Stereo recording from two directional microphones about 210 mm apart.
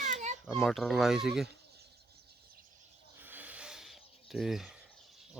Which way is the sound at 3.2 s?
10° right (ahead or behind).